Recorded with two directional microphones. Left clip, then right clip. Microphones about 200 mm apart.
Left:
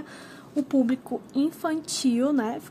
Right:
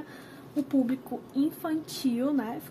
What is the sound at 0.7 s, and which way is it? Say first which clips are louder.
A woman's voice: left 4 dB; 45° left (ahead or behind).